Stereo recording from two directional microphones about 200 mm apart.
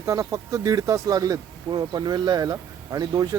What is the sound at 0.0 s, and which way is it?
Speech, 15° right (ahead or behind).